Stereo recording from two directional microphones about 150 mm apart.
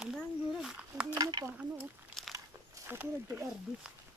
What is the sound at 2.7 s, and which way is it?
Speech, 15° right (ahead or behind).